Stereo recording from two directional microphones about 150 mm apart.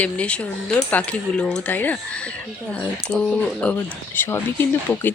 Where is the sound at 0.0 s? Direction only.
10° left (ahead or behind).